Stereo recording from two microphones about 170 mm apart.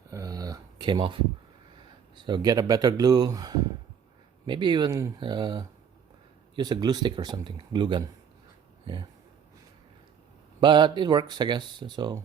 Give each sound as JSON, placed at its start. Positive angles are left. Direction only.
{"t": 0.1, "sound": "a sound", "side_deg": -20}
{"t": 2.1, "sound": "speech", "side_deg": -25}
{"t": 10.6, "sound": "speech", "side_deg": -25}